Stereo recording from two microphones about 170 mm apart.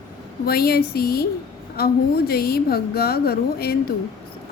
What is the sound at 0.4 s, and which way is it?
A woman's voice, 65° left (ahead or behind).